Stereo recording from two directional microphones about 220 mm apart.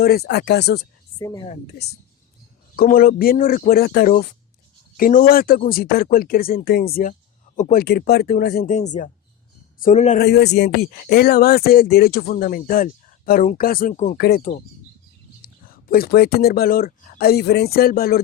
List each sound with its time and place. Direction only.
0.0 s speech: 45° left (ahead or behind)
1.2 s speech: 15° left (ahead or behind)
2.7 s speech: 40° left (ahead or behind)
10.2 s speech: 50° left (ahead or behind); by 14.2 s 35° left (ahead or behind)
14.2 s speech: 45° left (ahead or behind)
15.6 s speech: 40° left (ahead or behind)